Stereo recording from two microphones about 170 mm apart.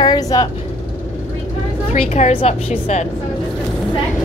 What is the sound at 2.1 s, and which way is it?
Speech, 40° left (ahead or behind).